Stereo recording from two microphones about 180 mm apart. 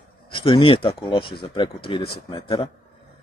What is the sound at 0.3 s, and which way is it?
Speech, 30° left (ahead or behind).